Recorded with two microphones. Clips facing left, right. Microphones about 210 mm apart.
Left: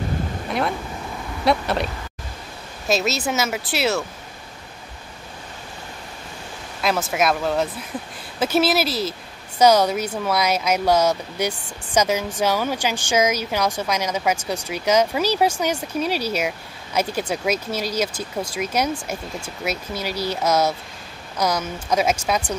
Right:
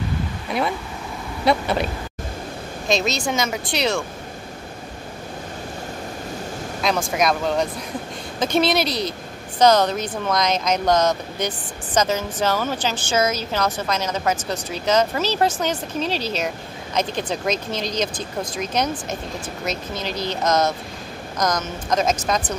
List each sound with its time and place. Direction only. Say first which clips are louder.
0.5 s vehicle: right 1 dB; centre (ahead or behind)
1.4 s a woman's voice: right 1 dB; centre (ahead or behind)
2.9 s a woman's voice: even; 5° left (ahead or behind)
6.8 s a woman's voice: even; 5° left (ahead or behind)